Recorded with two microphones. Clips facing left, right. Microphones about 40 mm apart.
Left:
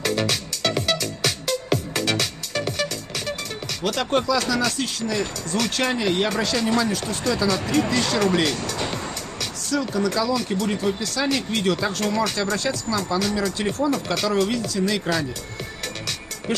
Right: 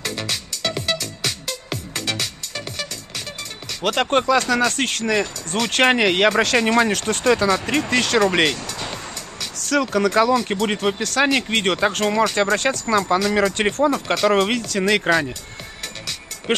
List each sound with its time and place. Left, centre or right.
0.0 s music: centre
3.8 s speech: right
8.6 s music: centre
9.6 s speech: right
16.5 s music: right